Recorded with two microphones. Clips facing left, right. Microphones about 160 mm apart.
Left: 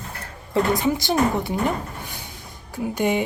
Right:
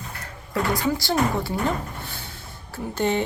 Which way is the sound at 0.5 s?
20° left (ahead or behind).